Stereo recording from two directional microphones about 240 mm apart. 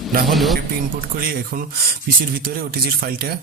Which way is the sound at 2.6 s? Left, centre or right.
Right.